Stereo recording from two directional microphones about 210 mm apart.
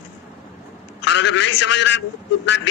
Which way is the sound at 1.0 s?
60° left (ahead or behind).